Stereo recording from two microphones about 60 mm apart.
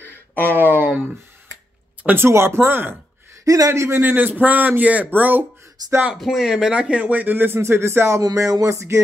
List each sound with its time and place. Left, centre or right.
0.0 s a sound: left
0.7 s speech: right
2.2 s speech: right
3.4 s a man's voice: right
4.0 s speech: right
5.8 s speech: right
6.1 s speech: centre; by 7.6 s right
7.6 s speech: right
8.2 s a sound: right